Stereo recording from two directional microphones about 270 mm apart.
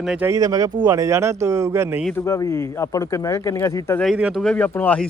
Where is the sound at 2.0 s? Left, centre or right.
Centre.